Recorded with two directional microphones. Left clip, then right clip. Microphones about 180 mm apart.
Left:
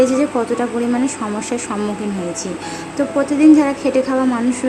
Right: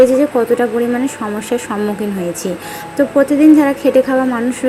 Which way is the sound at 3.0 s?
15° right (ahead or behind).